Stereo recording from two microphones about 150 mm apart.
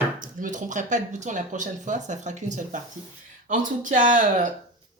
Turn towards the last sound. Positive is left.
turn(degrees=-55)  # may be behind; listen again after turning